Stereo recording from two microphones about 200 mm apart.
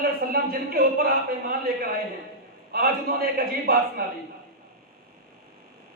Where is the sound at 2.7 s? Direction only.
50° right (ahead or behind).